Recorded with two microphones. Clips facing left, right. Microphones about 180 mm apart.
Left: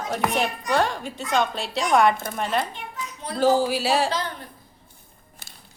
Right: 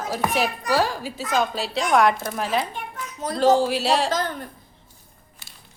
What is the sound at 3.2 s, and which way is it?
Speech, 45° right (ahead or behind).